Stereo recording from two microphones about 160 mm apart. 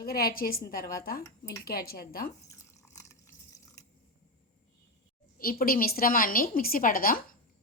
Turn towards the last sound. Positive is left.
turn(degrees=65)  # may be behind; listen again after turning